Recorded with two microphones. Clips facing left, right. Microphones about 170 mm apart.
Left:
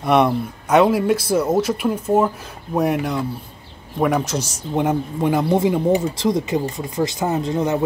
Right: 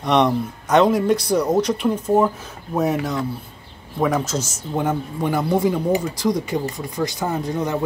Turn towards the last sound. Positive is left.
turn(degrees=25)  # may be behind; listen again after turning